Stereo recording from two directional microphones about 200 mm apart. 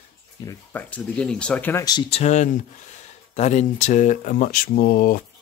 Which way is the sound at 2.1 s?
35° left (ahead or behind).